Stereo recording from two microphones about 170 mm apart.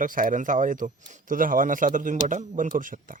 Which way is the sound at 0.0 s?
55° right (ahead or behind).